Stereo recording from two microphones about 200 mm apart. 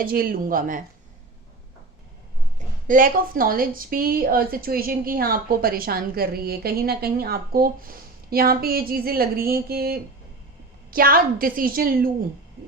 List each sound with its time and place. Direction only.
0.0 s a woman's voice: 50° right (ahead or behind)
2.6 s a woman's voice: 40° right (ahead or behind)